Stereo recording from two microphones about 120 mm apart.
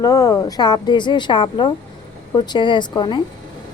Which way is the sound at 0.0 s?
30° left (ahead or behind).